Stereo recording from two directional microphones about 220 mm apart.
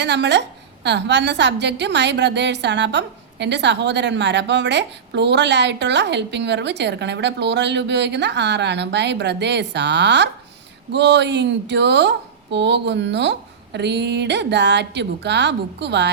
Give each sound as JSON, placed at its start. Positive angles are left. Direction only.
{"t": 0.0, "sound": "a woman's voice", "side_deg": -50}